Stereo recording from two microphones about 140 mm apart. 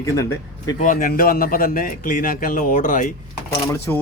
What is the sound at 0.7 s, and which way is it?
A man's voice, 70° left (ahead or behind).